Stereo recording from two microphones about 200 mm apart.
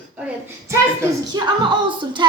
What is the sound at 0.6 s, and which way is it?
Speech, 15° right (ahead or behind).